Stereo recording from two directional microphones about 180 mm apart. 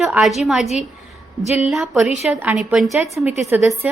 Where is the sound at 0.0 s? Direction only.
Centre (ahead or behind).